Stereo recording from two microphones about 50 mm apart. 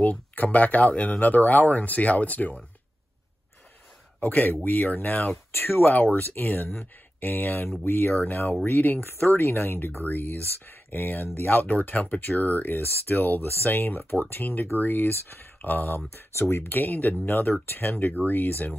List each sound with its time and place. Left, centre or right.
0.0 s speech: left
4.2 s speech: left
5.5 s speech: left
8.1 s speech: left
8.6 s speech: left
11.6 s speech: left
16.1 s speech: left